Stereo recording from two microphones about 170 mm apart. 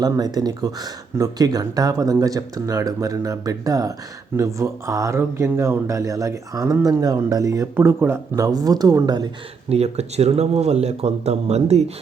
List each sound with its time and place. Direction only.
0.0 s speech: 20° right (ahead or behind)
9.7 s speech: 40° right (ahead or behind)